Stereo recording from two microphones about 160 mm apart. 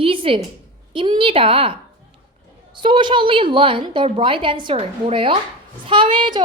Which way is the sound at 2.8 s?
30° right (ahead or behind).